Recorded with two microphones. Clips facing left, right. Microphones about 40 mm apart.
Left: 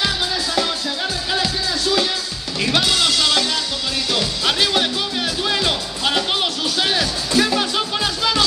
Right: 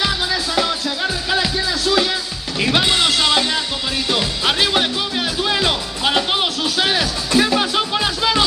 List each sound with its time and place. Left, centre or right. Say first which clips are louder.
0.6 s music: right 2 dB; centre
2.6 s music: right 2 dB; right